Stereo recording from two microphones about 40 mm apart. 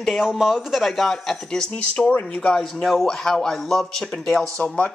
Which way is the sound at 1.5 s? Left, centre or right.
Centre.